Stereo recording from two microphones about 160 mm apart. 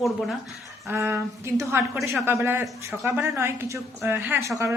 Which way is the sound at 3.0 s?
15° right (ahead or behind).